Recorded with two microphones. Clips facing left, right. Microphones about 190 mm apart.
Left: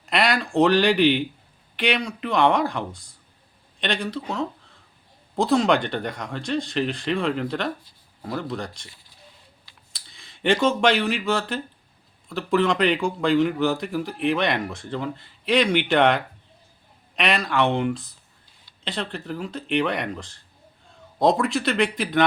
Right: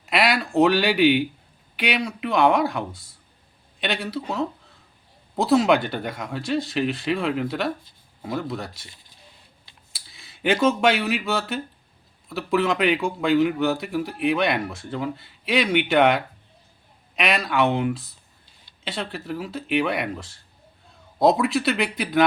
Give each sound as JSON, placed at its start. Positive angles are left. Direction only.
{"t": 0.0, "sound": "speech", "side_deg": -5}
{"t": 9.9, "sound": "speech", "side_deg": -5}